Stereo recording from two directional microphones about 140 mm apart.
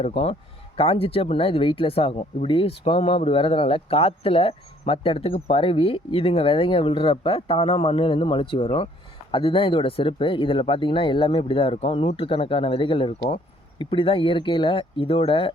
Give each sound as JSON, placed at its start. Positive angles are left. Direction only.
{"t": 0.0, "sound": "speech", "side_deg": 45}